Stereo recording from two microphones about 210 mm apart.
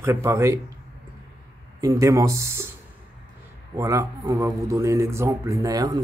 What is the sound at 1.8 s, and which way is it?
Speech, 15° right (ahead or behind).